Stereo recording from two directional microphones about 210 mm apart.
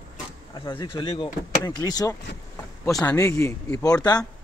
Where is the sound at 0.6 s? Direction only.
20° left (ahead or behind).